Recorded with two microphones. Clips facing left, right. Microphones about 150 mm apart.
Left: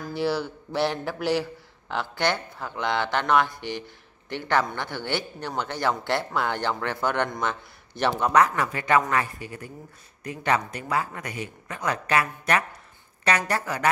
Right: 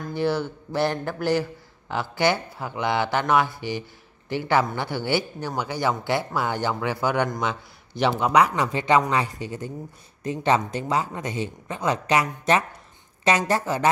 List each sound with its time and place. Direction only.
0.0 s a man's voice: centre (ahead or behind); by 13.8 s 25° right (ahead or behind)